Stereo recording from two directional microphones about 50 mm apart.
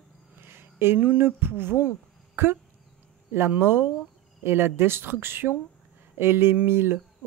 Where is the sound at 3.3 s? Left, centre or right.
Right.